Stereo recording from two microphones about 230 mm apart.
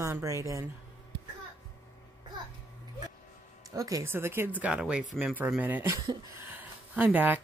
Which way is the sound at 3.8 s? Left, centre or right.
Centre.